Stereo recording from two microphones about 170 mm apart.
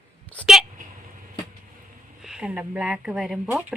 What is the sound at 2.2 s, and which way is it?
Speech, 5° right (ahead or behind).